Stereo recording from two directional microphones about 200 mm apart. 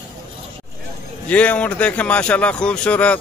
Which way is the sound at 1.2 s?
5° left (ahead or behind).